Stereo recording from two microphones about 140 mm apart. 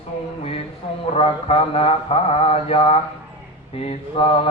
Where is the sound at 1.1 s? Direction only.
45° left (ahead or behind).